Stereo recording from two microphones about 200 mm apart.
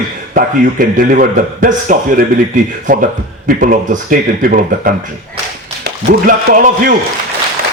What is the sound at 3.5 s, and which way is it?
A man's voice, 45° right (ahead or behind).